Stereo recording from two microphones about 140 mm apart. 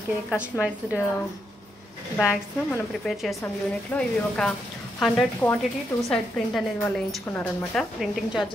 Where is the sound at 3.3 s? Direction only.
15° left (ahead or behind).